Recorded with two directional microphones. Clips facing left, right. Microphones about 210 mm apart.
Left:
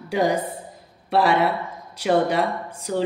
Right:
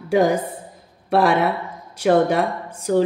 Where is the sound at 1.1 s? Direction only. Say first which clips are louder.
Right 2 dB; 50° right (ahead or behind).